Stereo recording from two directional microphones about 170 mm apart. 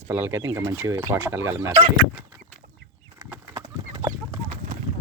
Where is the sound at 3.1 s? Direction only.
15° right (ahead or behind).